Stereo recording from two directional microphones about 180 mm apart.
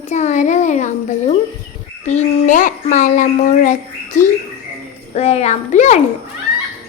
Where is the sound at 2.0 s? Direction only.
45° left (ahead or behind).